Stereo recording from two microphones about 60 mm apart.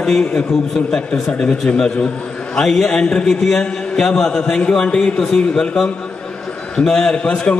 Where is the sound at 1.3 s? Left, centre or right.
Centre.